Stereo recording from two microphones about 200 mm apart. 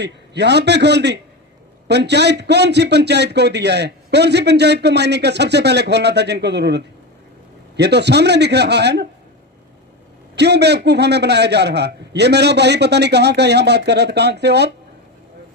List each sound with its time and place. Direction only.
0.0 s a man's voice: 55° right (ahead or behind)
10.3 s a man's voice: 55° right (ahead or behind)